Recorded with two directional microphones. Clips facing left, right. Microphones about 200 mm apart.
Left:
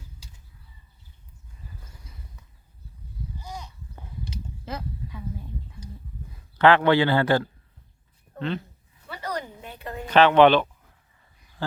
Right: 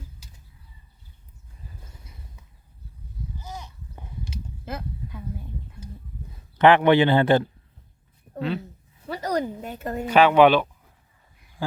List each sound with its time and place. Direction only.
3.4 s a sound: 5° right (ahead or behind)
6.6 s speech: 20° right (ahead or behind)
8.4 s speech: 5° right (ahead or behind)
9.0 s a woman's voice: 40° right (ahead or behind)
10.1 s speech: 10° right (ahead or behind)